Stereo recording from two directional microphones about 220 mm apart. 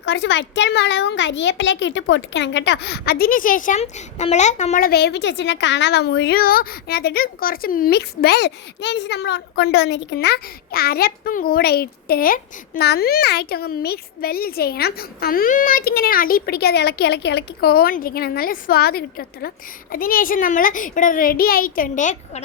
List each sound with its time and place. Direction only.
0.0 s a child's voice: 55° left (ahead or behind); by 22.2 s 35° left (ahead or behind)